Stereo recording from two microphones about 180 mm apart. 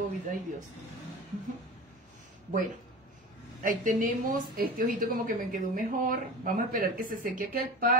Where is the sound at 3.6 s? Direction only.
50° right (ahead or behind).